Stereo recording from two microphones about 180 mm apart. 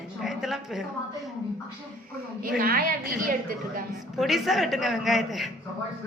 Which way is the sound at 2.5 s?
55° right (ahead or behind).